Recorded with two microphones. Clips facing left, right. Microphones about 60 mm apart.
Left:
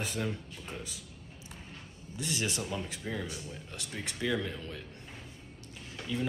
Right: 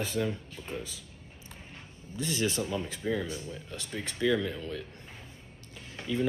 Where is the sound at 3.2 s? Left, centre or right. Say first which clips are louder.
Right 4 dB; right.